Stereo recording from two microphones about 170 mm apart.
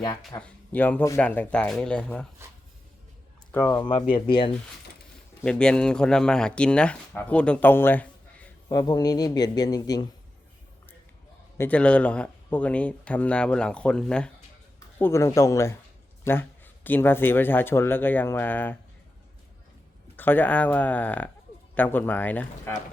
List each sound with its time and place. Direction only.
0.4 s a man's voice: 10° left (ahead or behind)
3.5 s a man's voice: 15° left (ahead or behind); by 4.5 s 30° left (ahead or behind)
5.4 s speech: 5° left (ahead or behind)
8.7 s a man's voice: 25° left (ahead or behind)
11.5 s a man's voice: 10° left (ahead or behind)
20.1 s a man's voice: 10° left (ahead or behind)